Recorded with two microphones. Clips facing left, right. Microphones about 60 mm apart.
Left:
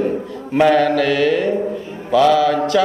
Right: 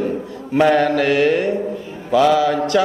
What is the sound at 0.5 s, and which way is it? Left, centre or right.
A man's voice, centre.